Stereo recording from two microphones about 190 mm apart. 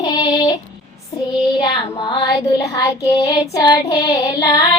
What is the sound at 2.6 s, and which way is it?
Female singing, 15° left (ahead or behind).